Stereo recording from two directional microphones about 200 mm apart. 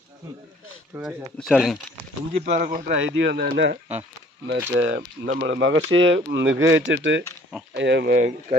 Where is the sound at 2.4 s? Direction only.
40° right (ahead or behind).